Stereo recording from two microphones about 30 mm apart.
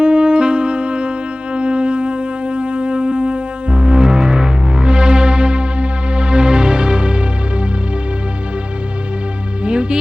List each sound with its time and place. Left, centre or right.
0.0 s music: right
9.6 s music: right